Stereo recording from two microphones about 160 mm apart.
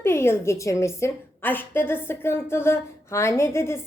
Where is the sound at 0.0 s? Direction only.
15° left (ahead or behind).